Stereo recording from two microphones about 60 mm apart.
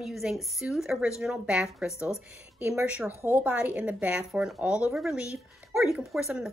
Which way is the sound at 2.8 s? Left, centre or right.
Right.